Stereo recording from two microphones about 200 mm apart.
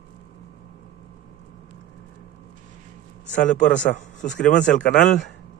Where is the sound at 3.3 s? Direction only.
40° left (ahead or behind).